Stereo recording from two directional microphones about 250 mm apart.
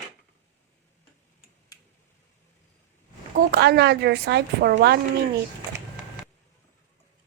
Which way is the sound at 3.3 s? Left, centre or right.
Right.